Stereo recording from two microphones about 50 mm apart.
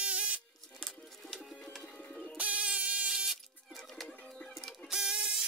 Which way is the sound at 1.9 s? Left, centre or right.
Centre.